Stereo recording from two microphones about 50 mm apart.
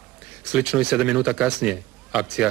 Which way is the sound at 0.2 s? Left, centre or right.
Centre.